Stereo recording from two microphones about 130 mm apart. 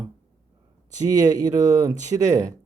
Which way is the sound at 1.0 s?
30° right (ahead or behind).